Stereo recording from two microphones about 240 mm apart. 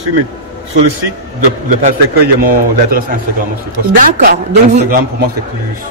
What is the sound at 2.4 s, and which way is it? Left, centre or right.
A woman's voice, right.